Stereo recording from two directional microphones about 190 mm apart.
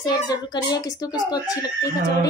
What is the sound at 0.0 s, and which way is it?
A child's voice, 20° left (ahead or behind).